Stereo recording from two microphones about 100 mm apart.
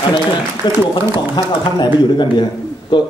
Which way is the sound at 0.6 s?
50° left (ahead or behind).